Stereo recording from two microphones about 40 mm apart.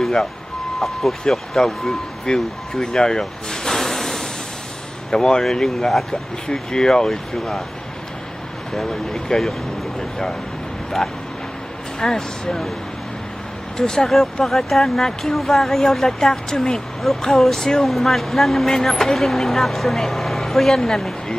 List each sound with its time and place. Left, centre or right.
0.7 s speech: centre
2.3 s speech: centre
2.8 s a sound: centre
5.1 s speech: centre
8.7 s speech: centre
12.0 s speech: centre
13.7 s speech: centre
17.0 s speech: centre